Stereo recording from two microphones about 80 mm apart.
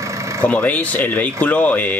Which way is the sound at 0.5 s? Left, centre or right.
Centre.